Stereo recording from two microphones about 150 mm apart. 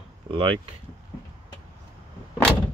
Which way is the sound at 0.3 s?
35° right (ahead or behind).